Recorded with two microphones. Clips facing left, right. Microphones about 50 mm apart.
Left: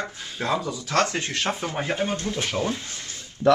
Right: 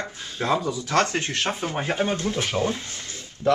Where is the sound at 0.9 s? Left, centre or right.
Right.